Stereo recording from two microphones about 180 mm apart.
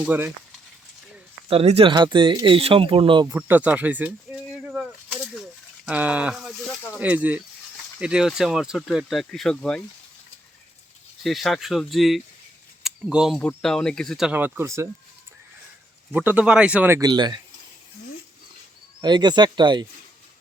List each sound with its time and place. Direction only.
0.0 s speech: 10° right (ahead or behind)
1.5 s speech: 35° right (ahead or behind)
3.3 s speech: 10° right (ahead or behind)
4.7 s a sound: 5° right (ahead or behind)
7.0 s speech: 10° right (ahead or behind)
11.2 s speech: centre (ahead or behind)
16.1 s speech: 10° right (ahead or behind)
17.1 s speech: 25° right (ahead or behind)
19.0 s speech: 25° right (ahead or behind)